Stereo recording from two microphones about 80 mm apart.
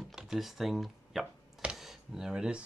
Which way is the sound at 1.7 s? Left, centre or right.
Centre.